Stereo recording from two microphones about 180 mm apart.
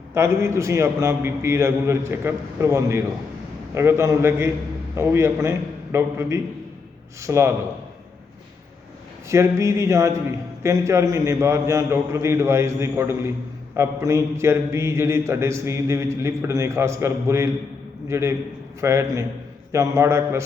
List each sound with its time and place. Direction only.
0.1 s a man's voice: 15° right (ahead or behind)
9.3 s a man's voice: 15° right (ahead or behind)